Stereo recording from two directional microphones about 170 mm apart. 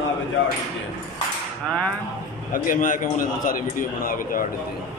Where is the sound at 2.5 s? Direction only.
50° left (ahead or behind).